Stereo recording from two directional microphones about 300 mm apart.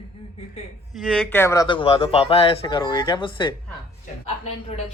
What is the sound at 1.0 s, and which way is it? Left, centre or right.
A man's voice, centre.